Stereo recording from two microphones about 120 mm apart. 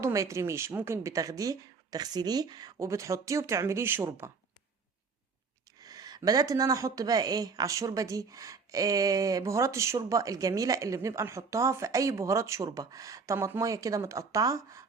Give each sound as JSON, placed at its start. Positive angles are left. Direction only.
{"t": 0.0, "sound": "a woman's voice", "side_deg": -25}
{"t": 5.8, "sound": "a woman's voice", "side_deg": -30}